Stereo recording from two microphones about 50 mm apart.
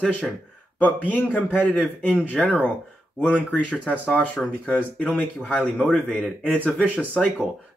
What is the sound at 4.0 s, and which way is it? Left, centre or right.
A man's voice, left.